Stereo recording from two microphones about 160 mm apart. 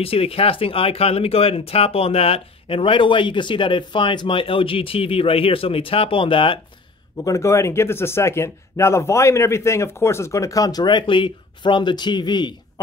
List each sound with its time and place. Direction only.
0.0 s speech: 35° left (ahead or behind)
7.2 s speech: 20° left (ahead or behind)